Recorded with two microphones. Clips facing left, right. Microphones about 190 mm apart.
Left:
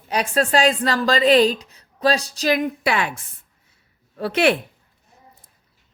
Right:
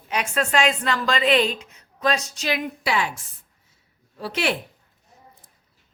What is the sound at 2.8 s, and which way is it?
A woman's voice, 60° left (ahead or behind).